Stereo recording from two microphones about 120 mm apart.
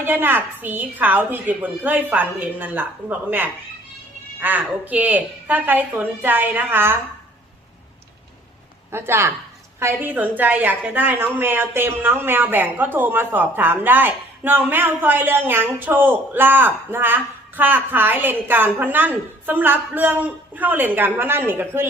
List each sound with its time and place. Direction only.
0.0 s a woman's voice: 15° right (ahead or behind)
8.9 s a woman's voice: 20° right (ahead or behind)